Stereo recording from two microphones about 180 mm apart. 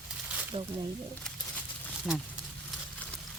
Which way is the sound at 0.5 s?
35° right (ahead or behind).